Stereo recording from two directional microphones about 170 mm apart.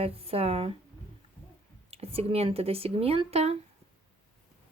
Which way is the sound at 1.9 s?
35° right (ahead or behind).